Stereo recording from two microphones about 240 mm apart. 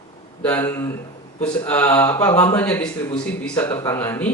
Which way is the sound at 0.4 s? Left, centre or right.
Centre.